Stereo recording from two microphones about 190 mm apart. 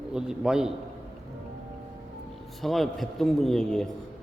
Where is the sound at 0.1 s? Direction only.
5° right (ahead or behind).